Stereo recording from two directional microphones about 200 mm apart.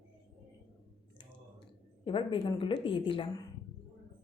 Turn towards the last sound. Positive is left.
turn(degrees=25)  # may be behind; listen again after turning